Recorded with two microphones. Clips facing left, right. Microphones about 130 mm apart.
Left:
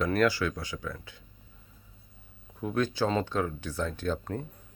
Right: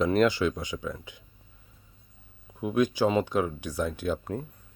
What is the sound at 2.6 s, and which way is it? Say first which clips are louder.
Speech: right 4 dB; 15° right (ahead or behind).